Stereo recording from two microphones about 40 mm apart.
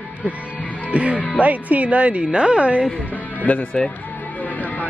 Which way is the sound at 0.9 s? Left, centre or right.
Right.